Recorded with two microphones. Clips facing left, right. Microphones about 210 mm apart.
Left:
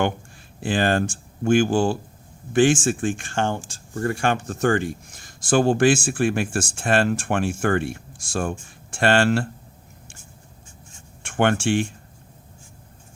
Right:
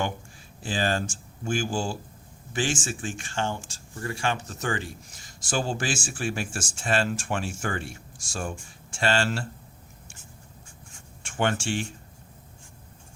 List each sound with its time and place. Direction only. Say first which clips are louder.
0.6 s speech: left 6 dB; 60° left (ahead or behind)
11.2 s speech: left 6 dB; 60° left (ahead or behind)